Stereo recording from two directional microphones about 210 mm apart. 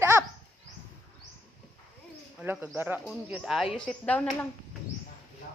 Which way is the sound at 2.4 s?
10° right (ahead or behind).